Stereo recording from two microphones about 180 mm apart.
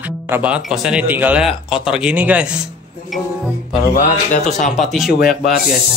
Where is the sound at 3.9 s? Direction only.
45° left (ahead or behind).